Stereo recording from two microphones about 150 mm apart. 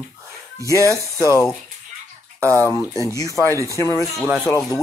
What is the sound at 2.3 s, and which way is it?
Speech, 20° right (ahead or behind).